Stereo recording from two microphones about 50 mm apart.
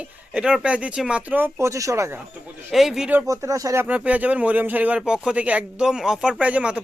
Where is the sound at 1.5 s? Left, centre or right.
Right.